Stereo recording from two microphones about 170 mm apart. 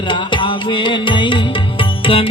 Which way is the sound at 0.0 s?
30° left (ahead or behind).